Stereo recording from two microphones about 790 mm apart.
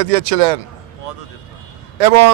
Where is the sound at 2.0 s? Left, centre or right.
Right.